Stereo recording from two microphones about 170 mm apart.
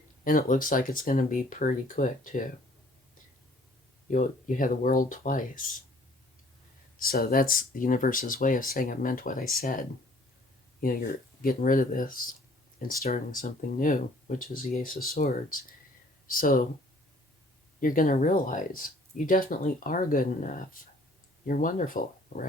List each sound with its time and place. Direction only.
0.3 s speech: 50° left (ahead or behind)
4.1 s speech: 50° left (ahead or behind)
7.0 s speech: 60° left (ahead or behind)
11.4 s speech: 55° left (ahead or behind)
17.7 s speech: 55° left (ahead or behind)